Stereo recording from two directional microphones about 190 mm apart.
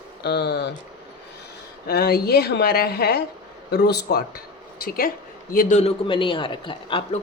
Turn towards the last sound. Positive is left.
turn(degrees=25)  # may be behind; listen again after turning